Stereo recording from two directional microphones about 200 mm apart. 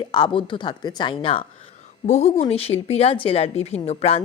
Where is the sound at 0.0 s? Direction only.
20° left (ahead or behind).